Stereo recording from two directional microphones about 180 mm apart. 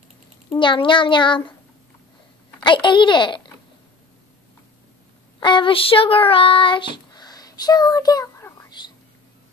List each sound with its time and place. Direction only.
0.5 s a child's voice: 25° left (ahead or behind)
2.6 s speech: 25° left (ahead or behind)
5.4 s child singing: 25° left (ahead or behind)